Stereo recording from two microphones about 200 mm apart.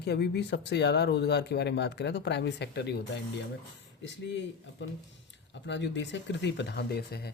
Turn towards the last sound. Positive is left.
turn(degrees=55)  # may be behind; listen again after turning